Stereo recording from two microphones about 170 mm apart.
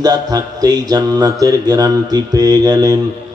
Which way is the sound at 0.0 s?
25° right (ahead or behind).